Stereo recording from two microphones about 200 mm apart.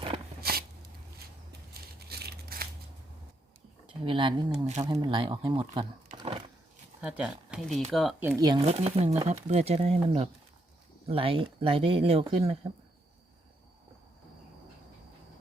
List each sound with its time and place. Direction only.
2.0 s crumpling: 55° right (ahead or behind)
4.0 s speech: 25° right (ahead or behind)
4.6 s speech: 35° right (ahead or behind)
6.1 s a sound: 25° right (ahead or behind)
7.0 s speech: 5° right (ahead or behind)
8.2 s speech: 10° right (ahead or behind)
8.4 s speech: 25° right (ahead or behind)